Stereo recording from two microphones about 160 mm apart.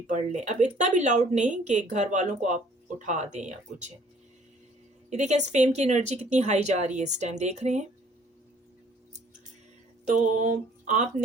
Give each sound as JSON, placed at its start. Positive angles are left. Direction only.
{"t": 0.1, "sound": "speech", "side_deg": -50}
{"t": 5.1, "sound": "speech", "side_deg": -45}
{"t": 10.1, "sound": "speech", "side_deg": -50}